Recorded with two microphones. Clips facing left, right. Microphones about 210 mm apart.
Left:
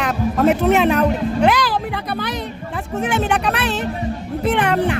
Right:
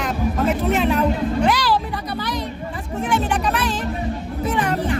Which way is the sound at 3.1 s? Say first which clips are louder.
Left 1 dB; 65° left (ahead or behind).